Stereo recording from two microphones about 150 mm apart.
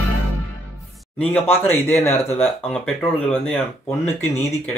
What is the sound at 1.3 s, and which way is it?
Speech, 15° left (ahead or behind).